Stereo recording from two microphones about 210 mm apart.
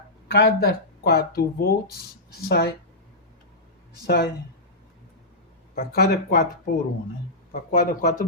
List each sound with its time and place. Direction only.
0.3 s speech: 45° left (ahead or behind)
4.0 s speech: 50° left (ahead or behind)
5.7 s speech: 50° left (ahead or behind)
7.5 s speech: 45° left (ahead or behind)